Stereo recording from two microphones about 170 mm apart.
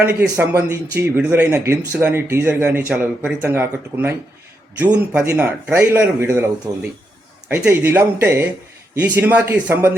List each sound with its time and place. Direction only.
0.0 s a man's voice: 10° right (ahead or behind)
7.4 s speech: 10° right (ahead or behind)